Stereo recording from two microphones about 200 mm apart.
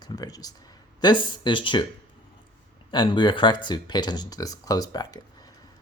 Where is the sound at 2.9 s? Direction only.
25° left (ahead or behind).